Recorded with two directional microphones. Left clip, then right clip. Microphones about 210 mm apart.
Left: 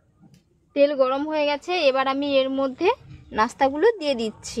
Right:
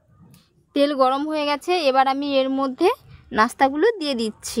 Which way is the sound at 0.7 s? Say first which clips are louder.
Right 1 dB; 60° right (ahead or behind).